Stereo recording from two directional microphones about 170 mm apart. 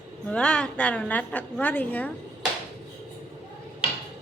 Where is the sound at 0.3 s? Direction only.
5° left (ahead or behind).